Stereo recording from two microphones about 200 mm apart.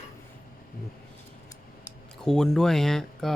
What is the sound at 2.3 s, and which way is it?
Speech, centre (ahead or behind).